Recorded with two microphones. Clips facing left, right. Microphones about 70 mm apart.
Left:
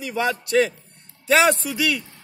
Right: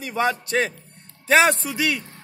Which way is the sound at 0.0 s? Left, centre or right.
Right.